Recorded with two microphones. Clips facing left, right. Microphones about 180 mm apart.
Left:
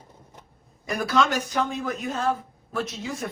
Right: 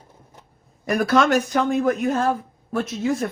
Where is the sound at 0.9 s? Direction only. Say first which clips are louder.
Right 5 dB; 60° right (ahead or behind).